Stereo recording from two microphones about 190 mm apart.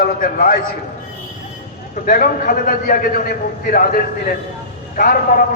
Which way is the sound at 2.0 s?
50° left (ahead or behind).